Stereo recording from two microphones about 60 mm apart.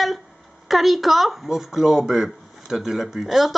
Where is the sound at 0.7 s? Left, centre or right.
Centre.